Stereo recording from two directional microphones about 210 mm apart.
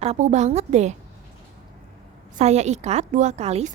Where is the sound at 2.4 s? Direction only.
35° right (ahead or behind).